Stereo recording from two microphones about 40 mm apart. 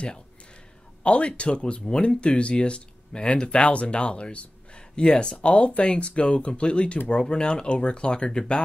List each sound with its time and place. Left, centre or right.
1.0 s speech: left